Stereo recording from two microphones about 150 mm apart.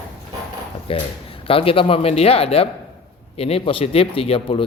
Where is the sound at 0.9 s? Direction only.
40° left (ahead or behind).